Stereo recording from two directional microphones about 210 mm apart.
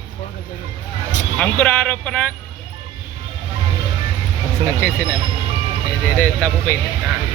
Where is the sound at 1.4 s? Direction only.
5° left (ahead or behind).